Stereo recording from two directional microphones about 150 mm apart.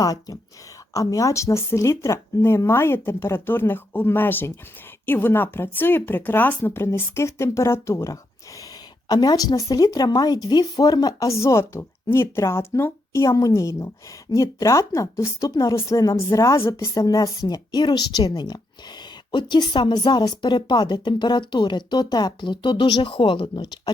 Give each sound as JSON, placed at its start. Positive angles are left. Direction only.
{"t": 0.0, "sound": "a woman's voice", "side_deg": 25}